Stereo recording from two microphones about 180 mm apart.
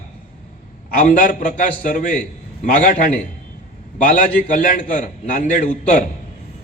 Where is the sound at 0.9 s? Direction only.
45° left (ahead or behind).